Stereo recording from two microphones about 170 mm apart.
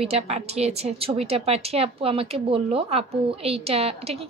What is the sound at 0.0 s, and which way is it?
A woman's voice, 35° right (ahead or behind).